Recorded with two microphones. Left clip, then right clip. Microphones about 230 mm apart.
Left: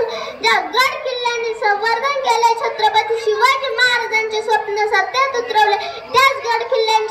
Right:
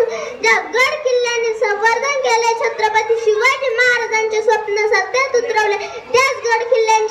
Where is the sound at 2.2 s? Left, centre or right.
Right.